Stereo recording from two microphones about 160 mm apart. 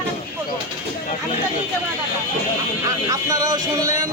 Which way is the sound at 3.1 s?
20° right (ahead or behind).